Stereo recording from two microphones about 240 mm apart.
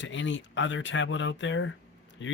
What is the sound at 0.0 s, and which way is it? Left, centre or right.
Speech, left.